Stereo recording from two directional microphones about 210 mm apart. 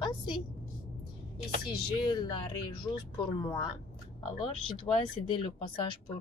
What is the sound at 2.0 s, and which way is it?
Speech, 20° left (ahead or behind).